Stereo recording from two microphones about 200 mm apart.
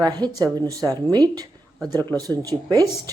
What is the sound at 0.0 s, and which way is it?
A woman's voice, 20° right (ahead or behind).